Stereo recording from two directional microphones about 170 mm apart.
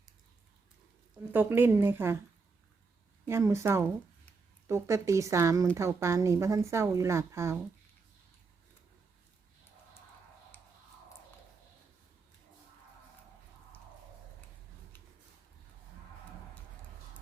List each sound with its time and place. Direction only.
1.3 s speech: 10° right (ahead or behind)
3.2 s speech: 15° right (ahead or behind)